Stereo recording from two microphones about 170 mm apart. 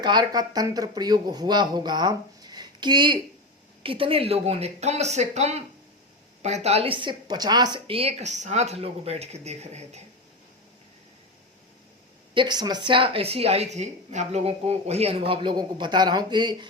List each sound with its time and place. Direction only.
0.0 s a woman's voice: 25° right (ahead or behind); by 10.0 s 40° right (ahead or behind)
12.3 s a woman's voice: 25° right (ahead or behind)